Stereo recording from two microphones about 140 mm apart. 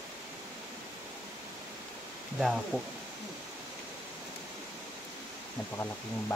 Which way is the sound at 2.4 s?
Centre (ahead or behind).